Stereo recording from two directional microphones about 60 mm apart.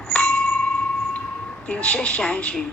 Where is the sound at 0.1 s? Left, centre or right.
Centre.